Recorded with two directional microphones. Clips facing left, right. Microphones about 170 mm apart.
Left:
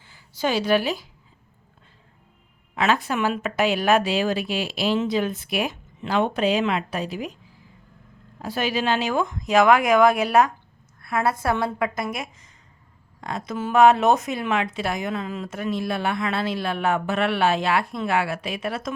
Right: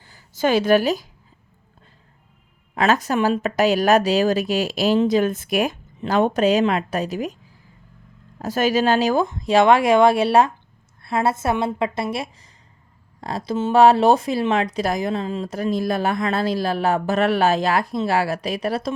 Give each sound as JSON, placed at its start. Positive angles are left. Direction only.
{"t": 0.0, "sound": "a woman's voice", "side_deg": -45}
{"t": 2.7, "sound": "speech", "side_deg": -45}
{"t": 8.4, "sound": "a woman's voice", "side_deg": -45}